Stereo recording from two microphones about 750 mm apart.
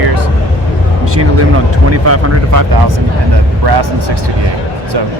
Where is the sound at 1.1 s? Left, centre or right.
Centre.